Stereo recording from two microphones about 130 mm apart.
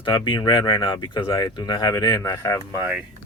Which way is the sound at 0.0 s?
40° left (ahead or behind).